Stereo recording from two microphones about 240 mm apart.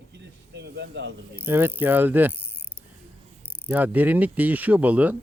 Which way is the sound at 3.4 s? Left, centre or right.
Centre.